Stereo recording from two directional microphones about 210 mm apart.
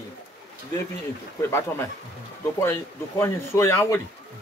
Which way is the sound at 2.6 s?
10° left (ahead or behind).